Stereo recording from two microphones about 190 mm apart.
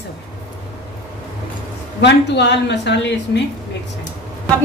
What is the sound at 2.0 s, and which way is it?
A woman's voice, 65° left (ahead or behind).